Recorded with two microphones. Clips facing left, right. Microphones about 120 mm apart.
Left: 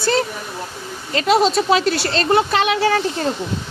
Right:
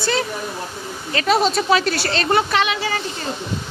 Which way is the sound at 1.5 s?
35° left (ahead or behind).